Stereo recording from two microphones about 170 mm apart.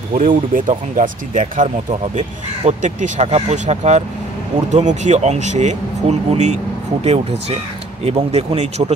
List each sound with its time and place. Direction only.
0.1 s speech: 50° right (ahead or behind)